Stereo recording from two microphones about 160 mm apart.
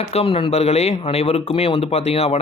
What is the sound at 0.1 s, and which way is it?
Speech, 40° left (ahead or behind).